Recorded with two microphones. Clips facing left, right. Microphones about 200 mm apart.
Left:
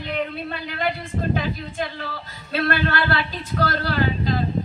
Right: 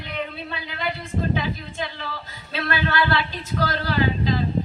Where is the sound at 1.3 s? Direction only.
50° left (ahead or behind).